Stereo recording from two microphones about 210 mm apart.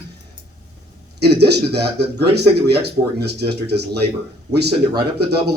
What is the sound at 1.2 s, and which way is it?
A man's voice, 50° right (ahead or behind).